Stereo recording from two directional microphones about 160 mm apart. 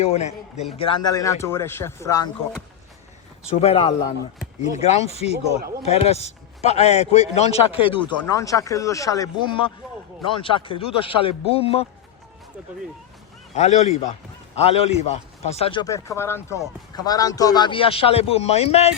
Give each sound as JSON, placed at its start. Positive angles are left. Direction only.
{"t": 0.0, "sound": "a man's voice", "side_deg": 40}
{"t": 1.0, "sound": "a man's voice", "side_deg": 20}
{"t": 3.6, "sound": "a man's voice", "side_deg": 35}
{"t": 8.4, "sound": "a man's voice", "side_deg": 20}
{"t": 13.6, "sound": "a man's voice", "side_deg": 45}
{"t": 15.8, "sound": "a man's voice", "side_deg": 20}